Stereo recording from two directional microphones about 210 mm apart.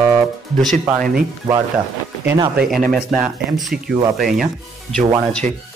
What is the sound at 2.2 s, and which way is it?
Speech, 20° right (ahead or behind).